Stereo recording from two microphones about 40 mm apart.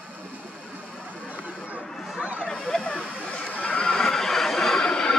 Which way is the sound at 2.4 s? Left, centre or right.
Centre.